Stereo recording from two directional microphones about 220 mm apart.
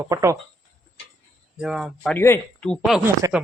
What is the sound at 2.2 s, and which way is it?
Speech, 10° left (ahead or behind).